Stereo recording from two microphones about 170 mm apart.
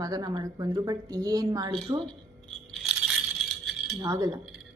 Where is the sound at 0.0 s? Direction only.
25° right (ahead or behind).